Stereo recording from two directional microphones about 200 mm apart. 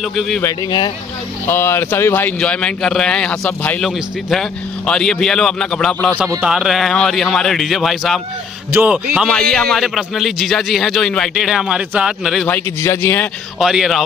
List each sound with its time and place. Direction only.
0.1 s a man's voice: centre (ahead or behind)
0.4 s a man's voice: 20° left (ahead or behind)
13.6 s a man's voice: centre (ahead or behind)